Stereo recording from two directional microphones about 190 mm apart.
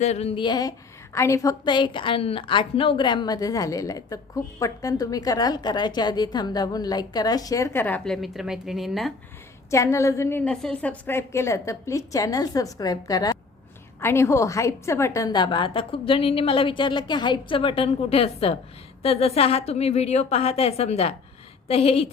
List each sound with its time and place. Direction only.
0.0 s a woman's voice: 35° left (ahead or behind); by 9.1 s centre (ahead or behind)
9.6 s a woman's voice: 15° left (ahead or behind); by 22.1 s 30° left (ahead or behind)